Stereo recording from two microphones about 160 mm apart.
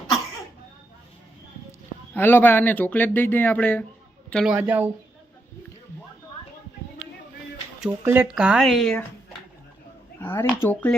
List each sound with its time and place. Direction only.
2.1 s speech: 10° left (ahead or behind)
4.4 s speech: 5° right (ahead or behind)
7.8 s speech: 10° right (ahead or behind)
10.2 s speech: 15° left (ahead or behind)